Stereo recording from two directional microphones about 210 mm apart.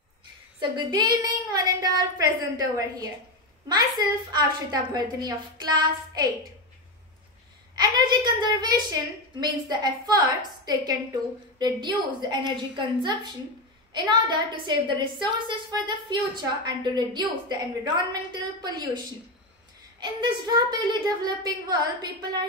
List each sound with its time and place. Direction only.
0.6 s a woman's voice: 20° right (ahead or behind)
4.3 s a woman's voice: 20° right (ahead or behind)
7.7 s a woman's voice: 20° right (ahead or behind)
20.0 s a woman's voice: 20° right (ahead or behind)